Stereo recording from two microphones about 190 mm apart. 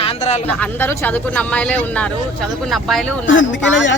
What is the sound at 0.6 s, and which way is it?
Speech, 10° left (ahead or behind).